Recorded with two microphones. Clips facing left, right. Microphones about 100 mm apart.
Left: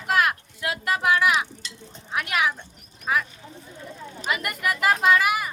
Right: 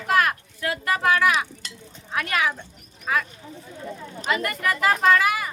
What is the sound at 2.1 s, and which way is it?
Speech, 15° left (ahead or behind).